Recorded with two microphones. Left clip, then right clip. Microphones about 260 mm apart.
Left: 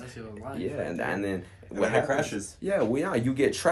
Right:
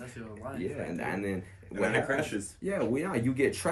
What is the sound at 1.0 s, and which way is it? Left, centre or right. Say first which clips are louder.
Speech: left 4 dB; centre.